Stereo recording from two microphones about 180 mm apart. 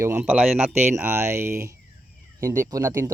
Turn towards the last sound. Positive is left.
turn(degrees=-15)  # may be behind; listen again after turning